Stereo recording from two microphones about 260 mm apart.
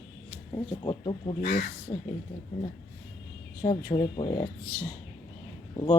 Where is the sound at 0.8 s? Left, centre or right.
Centre.